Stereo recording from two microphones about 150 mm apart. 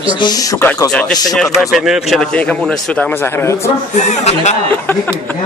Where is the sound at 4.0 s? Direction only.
50° left (ahead or behind).